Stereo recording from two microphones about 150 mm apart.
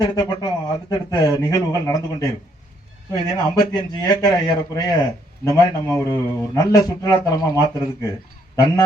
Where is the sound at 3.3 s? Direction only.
25° left (ahead or behind).